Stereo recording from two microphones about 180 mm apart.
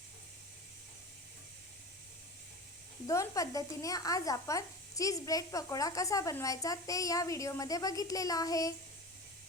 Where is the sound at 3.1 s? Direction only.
20° left (ahead or behind).